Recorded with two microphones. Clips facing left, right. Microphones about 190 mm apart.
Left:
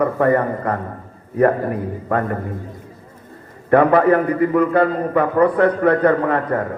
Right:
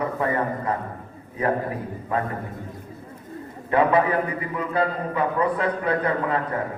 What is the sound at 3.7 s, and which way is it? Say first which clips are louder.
A man's voice: left 7 dB; 60° left (ahead or behind).